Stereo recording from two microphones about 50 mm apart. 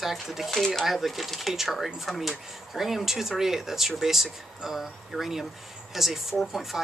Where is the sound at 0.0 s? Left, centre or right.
Centre.